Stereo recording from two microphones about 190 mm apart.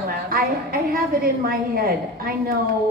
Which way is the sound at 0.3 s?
50° right (ahead or behind).